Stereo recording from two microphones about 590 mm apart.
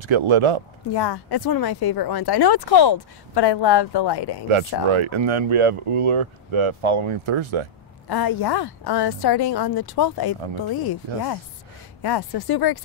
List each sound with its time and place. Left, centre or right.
0.0 s speech: right
0.9 s a woman's voice: left
4.5 s speech: right
8.1 s a woman's voice: left
12.0 s a woman's voice: left